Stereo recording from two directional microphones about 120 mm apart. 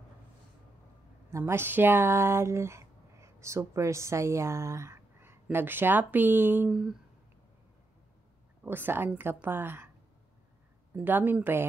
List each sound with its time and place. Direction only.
1.3 s speech: 20° right (ahead or behind)
6.7 s a sound: 5° right (ahead or behind)
8.6 s a woman's voice: 15° right (ahead or behind)
11.0 s a woman's voice: 15° right (ahead or behind)